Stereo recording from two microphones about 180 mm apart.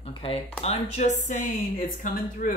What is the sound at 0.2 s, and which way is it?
Speech, 30° left (ahead or behind).